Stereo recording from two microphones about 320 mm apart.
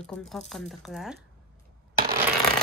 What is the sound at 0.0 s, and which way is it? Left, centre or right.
Coin, centre.